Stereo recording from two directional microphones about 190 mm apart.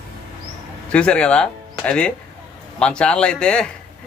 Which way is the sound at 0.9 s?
5° left (ahead or behind).